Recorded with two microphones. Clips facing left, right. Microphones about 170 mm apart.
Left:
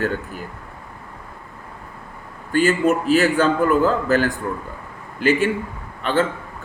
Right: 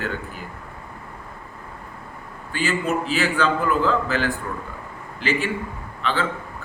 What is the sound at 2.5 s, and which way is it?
A man's voice, 45° left (ahead or behind).